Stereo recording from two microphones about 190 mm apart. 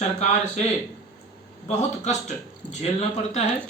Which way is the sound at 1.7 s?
35° left (ahead or behind).